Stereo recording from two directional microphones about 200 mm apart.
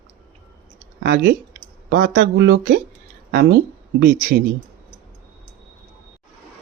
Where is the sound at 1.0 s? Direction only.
55° right (ahead or behind).